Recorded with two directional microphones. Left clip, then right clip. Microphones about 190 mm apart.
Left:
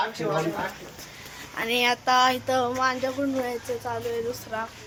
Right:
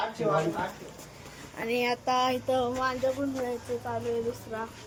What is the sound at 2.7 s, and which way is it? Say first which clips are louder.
Speech: left 5 dB; 30° left (ahead or behind).